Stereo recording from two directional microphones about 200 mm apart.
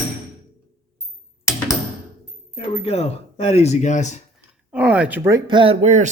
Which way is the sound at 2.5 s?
30° left (ahead or behind).